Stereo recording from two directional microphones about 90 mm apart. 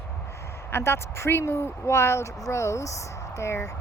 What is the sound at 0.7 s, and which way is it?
A woman's voice, 30° left (ahead or behind).